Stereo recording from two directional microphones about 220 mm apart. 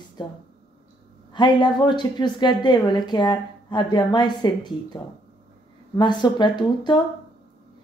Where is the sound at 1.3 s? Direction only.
20° left (ahead or behind).